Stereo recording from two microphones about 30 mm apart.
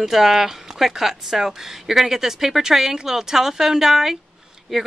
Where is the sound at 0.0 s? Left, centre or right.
Centre.